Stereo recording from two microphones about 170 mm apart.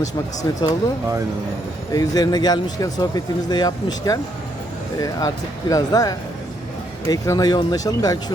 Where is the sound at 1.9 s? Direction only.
20° left (ahead or behind).